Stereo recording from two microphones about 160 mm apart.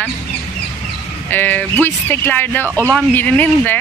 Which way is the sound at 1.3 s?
10° left (ahead or behind).